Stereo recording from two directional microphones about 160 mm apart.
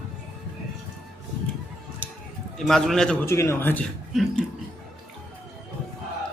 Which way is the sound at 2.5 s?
Centre (ahead or behind).